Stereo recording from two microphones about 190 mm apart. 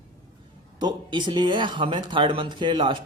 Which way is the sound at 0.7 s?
25° right (ahead or behind).